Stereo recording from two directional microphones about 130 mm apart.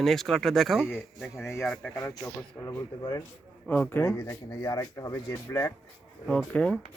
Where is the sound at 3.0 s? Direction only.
35° left (ahead or behind).